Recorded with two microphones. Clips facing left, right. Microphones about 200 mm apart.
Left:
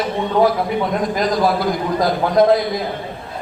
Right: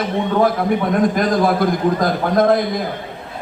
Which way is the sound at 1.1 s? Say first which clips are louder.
Right 1 dB; 55° right (ahead or behind).